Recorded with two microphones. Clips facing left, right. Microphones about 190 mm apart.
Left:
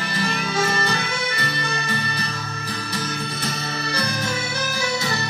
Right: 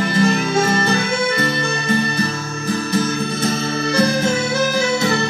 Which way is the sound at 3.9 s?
50° right (ahead or behind).